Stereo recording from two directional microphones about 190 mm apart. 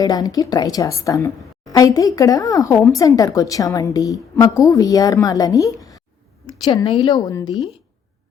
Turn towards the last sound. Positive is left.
turn(degrees=20)  # may be behind; listen again after turning